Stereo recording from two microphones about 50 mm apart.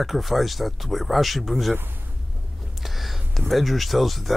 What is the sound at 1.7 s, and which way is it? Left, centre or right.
Speech, right.